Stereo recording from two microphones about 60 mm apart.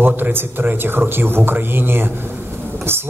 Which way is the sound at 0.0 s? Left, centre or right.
Right.